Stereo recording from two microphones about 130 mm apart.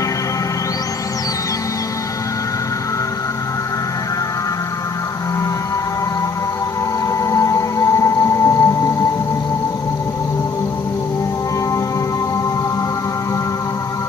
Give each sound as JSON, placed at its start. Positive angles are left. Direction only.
{"t": 7.2, "sound": "music", "side_deg": 25}